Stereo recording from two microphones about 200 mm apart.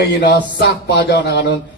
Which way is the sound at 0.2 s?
60° left (ahead or behind).